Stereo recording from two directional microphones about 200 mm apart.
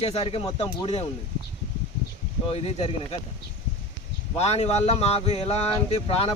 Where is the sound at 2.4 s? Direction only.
30° left (ahead or behind).